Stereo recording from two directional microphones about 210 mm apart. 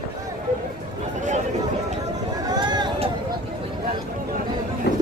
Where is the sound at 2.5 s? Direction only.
20° right (ahead or behind).